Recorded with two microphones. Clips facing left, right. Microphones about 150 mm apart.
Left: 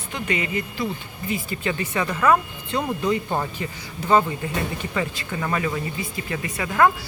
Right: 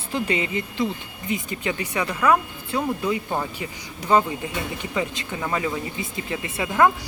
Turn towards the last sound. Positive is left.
turn(degrees=-20)  # may be behind; listen again after turning